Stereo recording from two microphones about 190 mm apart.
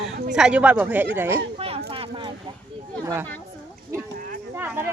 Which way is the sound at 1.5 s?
30° right (ahead or behind).